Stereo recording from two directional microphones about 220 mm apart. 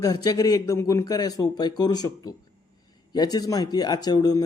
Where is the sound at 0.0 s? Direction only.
15° left (ahead or behind).